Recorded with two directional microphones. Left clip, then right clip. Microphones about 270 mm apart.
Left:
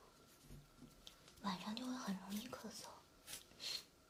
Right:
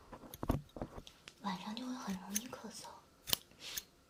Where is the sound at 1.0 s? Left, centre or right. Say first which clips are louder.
Left 2 dB; centre.